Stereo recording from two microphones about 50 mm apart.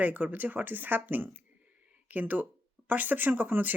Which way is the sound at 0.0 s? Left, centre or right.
Right.